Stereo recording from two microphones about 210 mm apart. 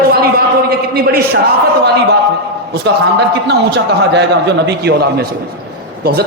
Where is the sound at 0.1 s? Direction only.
45° right (ahead or behind).